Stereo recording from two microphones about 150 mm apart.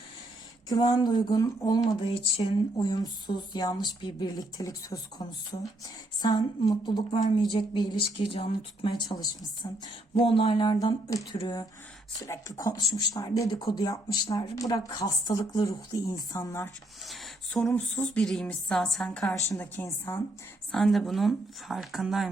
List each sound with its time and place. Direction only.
0.7 s speech: 30° left (ahead or behind)
17.1 s a sound: centre (ahead or behind)
17.9 s a woman's voice: 10° left (ahead or behind)
20.7 s a woman's voice: centre (ahead or behind)